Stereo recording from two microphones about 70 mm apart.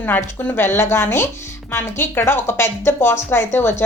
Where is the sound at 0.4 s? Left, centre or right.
Left.